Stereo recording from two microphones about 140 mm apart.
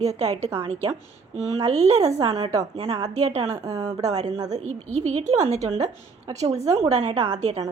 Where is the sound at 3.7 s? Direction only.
25° right (ahead or behind).